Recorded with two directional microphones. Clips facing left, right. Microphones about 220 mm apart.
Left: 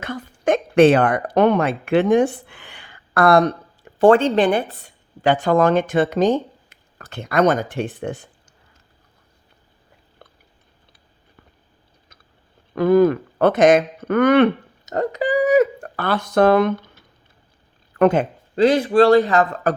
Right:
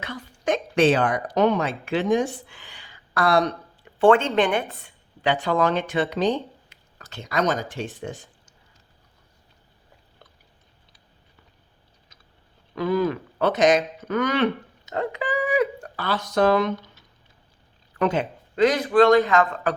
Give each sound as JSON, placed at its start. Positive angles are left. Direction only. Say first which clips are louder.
{"t": 0.0, "sound": "speech", "louder": "left 6 dB", "side_deg": 50}
{"t": 10.2, "sound": "chewing", "louder": "left 6 dB", "side_deg": 55}
{"t": 12.7, "sound": "speech", "louder": "left 8 dB", "side_deg": 50}
{"t": 15.1, "sound": "a sound", "louder": "left 9 dB", "side_deg": 40}
{"t": 17.9, "sound": "speech", "louder": "left 7 dB", "side_deg": 55}
{"t": 18.5, "sound": "a man's voice", "louder": "left 3 dB", "side_deg": 30}